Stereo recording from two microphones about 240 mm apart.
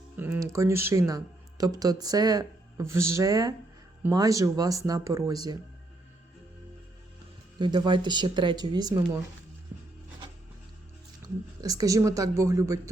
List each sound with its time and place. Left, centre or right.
0.2 s speech: centre
7.6 s speech: centre
11.6 s speech: centre